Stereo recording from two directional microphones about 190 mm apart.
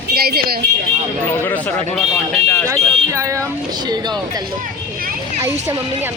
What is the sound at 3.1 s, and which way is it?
Speech, 15° right (ahead or behind).